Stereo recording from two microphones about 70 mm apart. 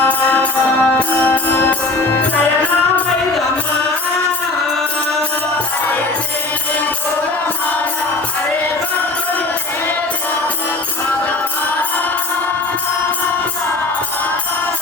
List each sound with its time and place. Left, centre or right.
0.0 s music: left